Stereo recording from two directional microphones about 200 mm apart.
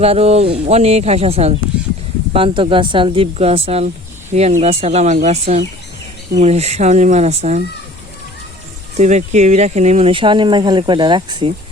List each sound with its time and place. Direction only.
0.0 s speech: 30° right (ahead or behind)
9.0 s speech: 35° right (ahead or behind)